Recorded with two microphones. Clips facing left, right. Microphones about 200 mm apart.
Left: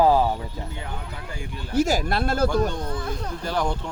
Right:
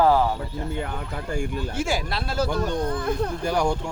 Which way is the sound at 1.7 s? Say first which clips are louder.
Left 10 dB; 40° left (ahead or behind).